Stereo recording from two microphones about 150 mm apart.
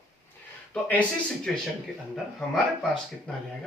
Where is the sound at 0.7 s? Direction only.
10° left (ahead or behind).